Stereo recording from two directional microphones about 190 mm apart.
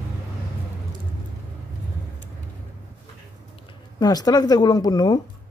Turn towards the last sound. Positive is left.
turn(degrees=20)  # may be behind; listen again after turning